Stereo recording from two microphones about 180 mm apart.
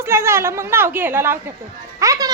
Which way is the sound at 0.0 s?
15° right (ahead or behind).